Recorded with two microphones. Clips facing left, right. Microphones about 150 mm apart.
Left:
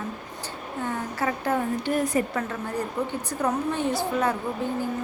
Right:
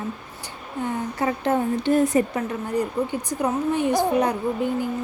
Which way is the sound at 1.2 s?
25° right (ahead or behind).